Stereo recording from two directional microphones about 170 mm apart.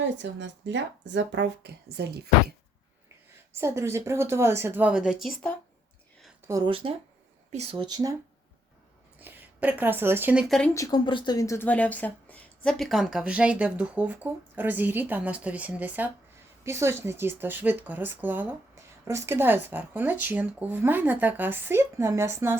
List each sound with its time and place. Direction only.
0.0 s a woman's voice: 90° right; by 2.3 s 70° right (ahead or behind)
3.5 s speech: 15° right (ahead or behind)
6.5 s speech: 30° right (ahead or behind)
7.9 s speech: 20° right (ahead or behind)
9.1 s speech: 10° right (ahead or behind)
10.8 s speech: 25° left (ahead or behind); by 22.5 s 15° right (ahead or behind)